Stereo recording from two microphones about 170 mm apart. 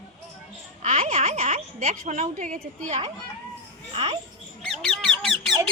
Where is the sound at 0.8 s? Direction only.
40° right (ahead or behind).